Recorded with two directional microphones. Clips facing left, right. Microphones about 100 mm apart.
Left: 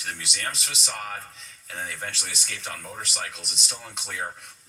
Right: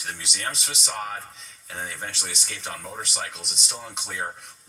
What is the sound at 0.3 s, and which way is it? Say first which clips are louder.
Speech: right 1 dB; 25° right (ahead or behind).